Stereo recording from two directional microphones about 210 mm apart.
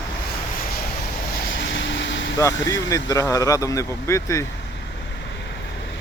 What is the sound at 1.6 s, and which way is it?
Vehicle, 60° left (ahead or behind).